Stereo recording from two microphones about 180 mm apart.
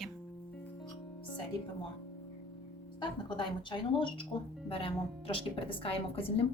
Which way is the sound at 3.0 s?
25° left (ahead or behind).